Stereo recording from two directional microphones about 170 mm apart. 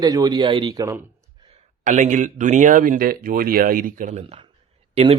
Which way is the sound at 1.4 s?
30° right (ahead or behind).